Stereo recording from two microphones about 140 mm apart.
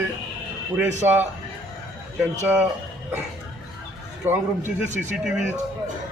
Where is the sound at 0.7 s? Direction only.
15° right (ahead or behind).